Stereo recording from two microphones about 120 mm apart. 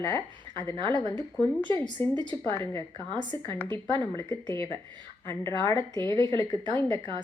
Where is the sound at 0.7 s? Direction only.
40° right (ahead or behind).